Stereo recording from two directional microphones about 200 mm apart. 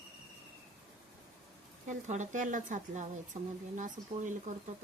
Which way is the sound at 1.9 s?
40° right (ahead or behind).